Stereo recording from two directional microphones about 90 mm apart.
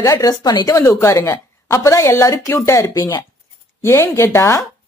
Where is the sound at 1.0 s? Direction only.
25° left (ahead or behind).